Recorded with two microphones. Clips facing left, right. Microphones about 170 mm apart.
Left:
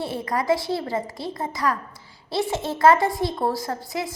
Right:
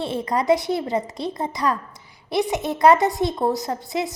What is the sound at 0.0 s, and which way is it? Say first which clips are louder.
A woman's voice: right 3 dB; 20° right (ahead or behind).